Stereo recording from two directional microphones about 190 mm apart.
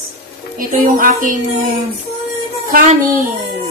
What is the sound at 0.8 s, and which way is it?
Speech, 45° right (ahead or behind).